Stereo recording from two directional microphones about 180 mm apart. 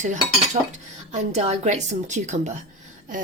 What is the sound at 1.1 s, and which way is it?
A woman's voice, 40° right (ahead or behind).